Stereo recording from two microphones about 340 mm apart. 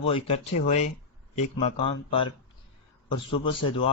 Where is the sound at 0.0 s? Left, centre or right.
Centre.